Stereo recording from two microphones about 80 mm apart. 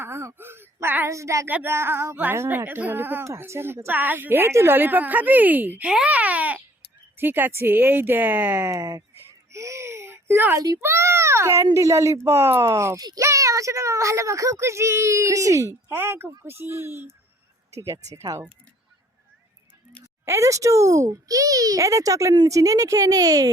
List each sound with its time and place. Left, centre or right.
0.0 s a child's voice: right
2.1 s a woman's voice: right
2.4 s a child's voice: right
2.6 s a woman's voice: right
8.7 s a child's voice: right
9.5 s a sound: right
10.8 s a child's voice: right
20.2 s a child's voice: right